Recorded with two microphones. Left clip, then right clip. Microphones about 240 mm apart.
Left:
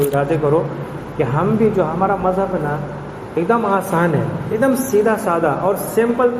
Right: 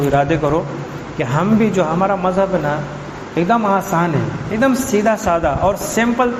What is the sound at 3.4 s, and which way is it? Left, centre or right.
A man's voice, right.